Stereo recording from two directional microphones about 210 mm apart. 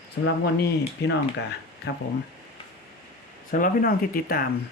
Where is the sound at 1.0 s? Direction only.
55° left (ahead or behind).